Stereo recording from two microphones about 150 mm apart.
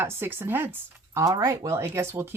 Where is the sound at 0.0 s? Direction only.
15° right (ahead or behind).